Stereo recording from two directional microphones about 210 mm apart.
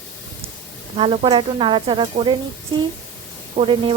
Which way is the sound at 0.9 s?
25° right (ahead or behind).